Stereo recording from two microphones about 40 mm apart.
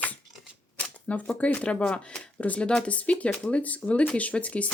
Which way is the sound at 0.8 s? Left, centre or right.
Left.